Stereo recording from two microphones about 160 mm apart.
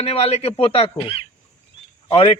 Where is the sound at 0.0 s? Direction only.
40° left (ahead or behind).